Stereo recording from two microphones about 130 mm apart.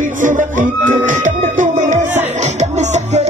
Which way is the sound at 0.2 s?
80° right.